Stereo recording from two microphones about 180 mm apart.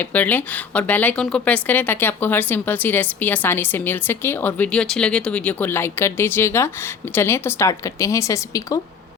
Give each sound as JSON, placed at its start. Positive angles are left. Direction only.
{"t": 0.0, "sound": "a woman's voice", "side_deg": 10}